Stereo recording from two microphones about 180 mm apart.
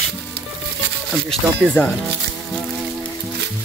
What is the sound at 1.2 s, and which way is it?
Speech, 5° left (ahead or behind).